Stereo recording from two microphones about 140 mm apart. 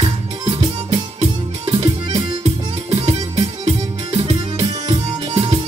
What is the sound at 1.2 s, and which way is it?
Music, 40° right (ahead or behind).